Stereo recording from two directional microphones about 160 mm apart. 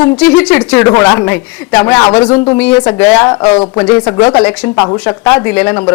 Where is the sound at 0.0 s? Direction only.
5° left (ahead or behind).